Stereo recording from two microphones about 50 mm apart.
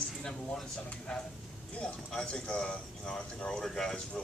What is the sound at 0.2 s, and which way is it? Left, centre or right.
Speech, centre.